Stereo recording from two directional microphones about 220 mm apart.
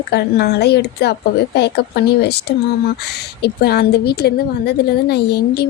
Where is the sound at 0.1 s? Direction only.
45° left (ahead or behind).